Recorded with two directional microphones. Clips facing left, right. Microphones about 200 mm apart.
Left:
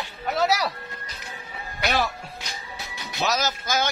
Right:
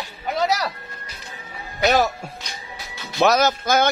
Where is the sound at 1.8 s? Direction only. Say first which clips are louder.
Right 7 dB; 45° right (ahead or behind).